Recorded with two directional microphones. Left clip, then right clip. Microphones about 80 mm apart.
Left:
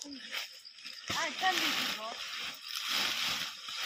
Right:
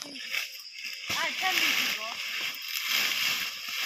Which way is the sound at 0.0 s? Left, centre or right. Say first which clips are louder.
Right 7 dB; centre.